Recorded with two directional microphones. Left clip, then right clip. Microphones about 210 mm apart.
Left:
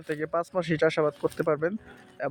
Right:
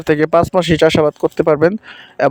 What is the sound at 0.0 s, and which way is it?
Speech, 50° right (ahead or behind).